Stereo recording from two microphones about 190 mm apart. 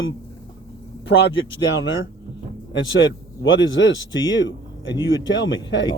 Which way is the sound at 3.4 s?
80° left.